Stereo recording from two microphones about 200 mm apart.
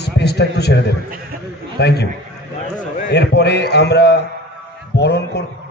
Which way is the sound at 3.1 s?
55° left (ahead or behind).